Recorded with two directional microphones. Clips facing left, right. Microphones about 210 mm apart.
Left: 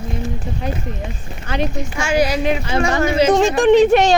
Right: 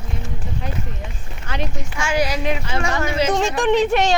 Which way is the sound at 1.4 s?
35° left (ahead or behind).